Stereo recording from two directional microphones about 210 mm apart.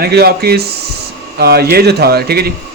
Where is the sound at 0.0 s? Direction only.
50° right (ahead or behind).